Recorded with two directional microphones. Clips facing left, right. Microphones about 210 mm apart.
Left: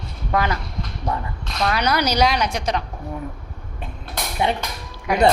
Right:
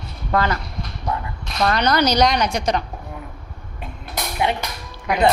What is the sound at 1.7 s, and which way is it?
A woman's voice, 5° left (ahead or behind).